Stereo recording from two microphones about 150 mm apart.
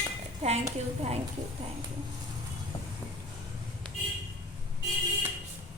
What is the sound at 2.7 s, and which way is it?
Vehicle, 35° left (ahead or behind).